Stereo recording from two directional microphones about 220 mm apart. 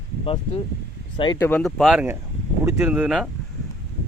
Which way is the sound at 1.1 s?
20° left (ahead or behind).